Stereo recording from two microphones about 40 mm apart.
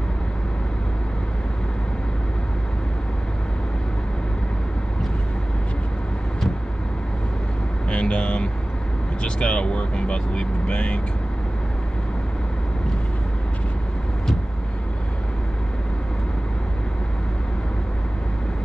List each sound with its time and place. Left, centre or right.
7.9 s vehicle: left
9.2 s speech: left